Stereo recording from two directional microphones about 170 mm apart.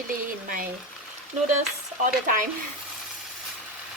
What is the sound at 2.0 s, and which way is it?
Speech, 50° right (ahead or behind).